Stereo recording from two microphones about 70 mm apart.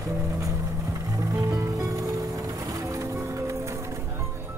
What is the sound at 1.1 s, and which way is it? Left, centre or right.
Music, right.